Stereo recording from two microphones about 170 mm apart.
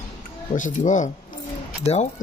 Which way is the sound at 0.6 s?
50° left (ahead or behind).